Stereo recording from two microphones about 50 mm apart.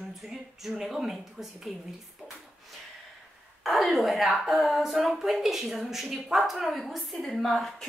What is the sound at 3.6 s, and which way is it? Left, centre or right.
Speech, centre.